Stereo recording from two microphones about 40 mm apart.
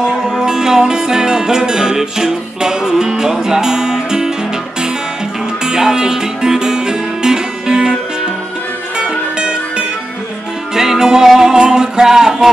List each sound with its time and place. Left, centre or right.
0.0 s music: centre
5.6 s music: centre
9.4 s music: right
10.7 s music: centre